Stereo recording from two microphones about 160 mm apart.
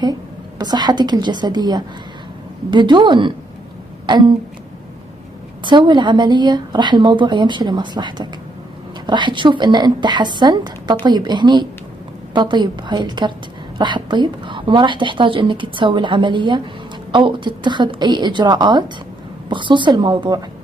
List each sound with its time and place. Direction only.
0.6 s a woman's voice: 25° right (ahead or behind)
5.7 s a woman's voice: 30° right (ahead or behind)